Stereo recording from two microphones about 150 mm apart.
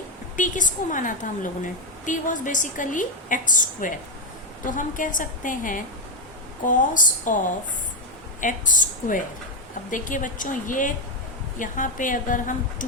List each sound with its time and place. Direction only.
0.3 s a woman's voice: 60° left (ahead or behind)